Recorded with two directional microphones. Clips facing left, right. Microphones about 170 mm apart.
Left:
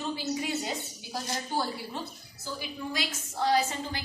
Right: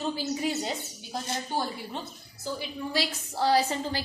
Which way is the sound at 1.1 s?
25° right (ahead or behind).